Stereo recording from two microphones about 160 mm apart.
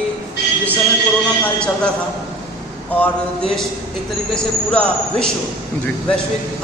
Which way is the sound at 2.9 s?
10° left (ahead or behind).